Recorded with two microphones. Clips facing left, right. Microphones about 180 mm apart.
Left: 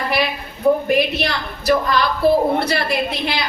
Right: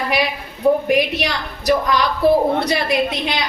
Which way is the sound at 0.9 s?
15° right (ahead or behind).